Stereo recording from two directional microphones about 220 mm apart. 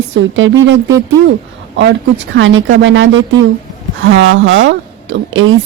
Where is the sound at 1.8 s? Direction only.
55° right (ahead or behind).